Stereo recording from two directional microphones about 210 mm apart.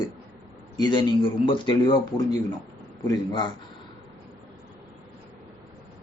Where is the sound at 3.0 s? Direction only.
20° left (ahead or behind).